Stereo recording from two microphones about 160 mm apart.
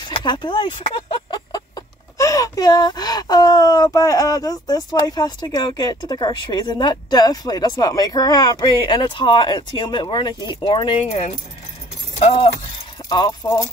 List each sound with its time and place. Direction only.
0.0 s speech: 30° left (ahead or behind)
11.1 s speech: 40° left (ahead or behind)
13.4 s speech: 20° left (ahead or behind)